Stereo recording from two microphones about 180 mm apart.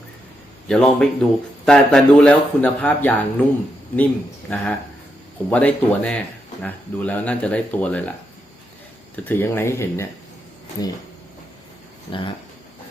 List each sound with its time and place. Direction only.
0.7 s speech: 5° left (ahead or behind)
9.1 s speech: 10° left (ahead or behind)
12.1 s speech: 30° left (ahead or behind)